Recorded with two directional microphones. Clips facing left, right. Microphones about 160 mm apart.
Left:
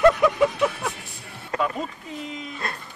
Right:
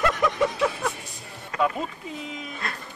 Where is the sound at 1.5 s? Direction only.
35° left (ahead or behind).